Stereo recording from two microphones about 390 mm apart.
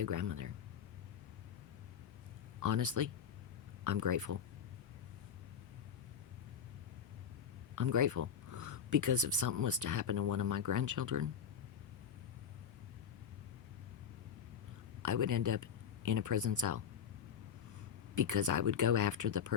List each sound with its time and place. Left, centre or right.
0.0 s speech: right
2.6 s speech: right
7.8 s speech: right
15.0 s speech: right
18.1 s speech: right